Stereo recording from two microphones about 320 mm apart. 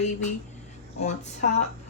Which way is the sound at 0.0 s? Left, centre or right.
Left.